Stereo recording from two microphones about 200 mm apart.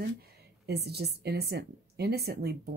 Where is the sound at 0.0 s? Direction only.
50° right (ahead or behind).